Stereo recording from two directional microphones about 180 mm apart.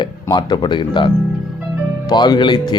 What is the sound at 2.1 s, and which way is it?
Speech, 25° left (ahead or behind).